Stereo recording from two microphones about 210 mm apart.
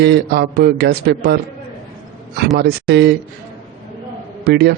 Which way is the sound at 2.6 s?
50° right (ahead or behind).